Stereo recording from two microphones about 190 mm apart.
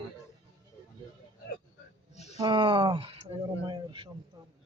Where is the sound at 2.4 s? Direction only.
25° right (ahead or behind).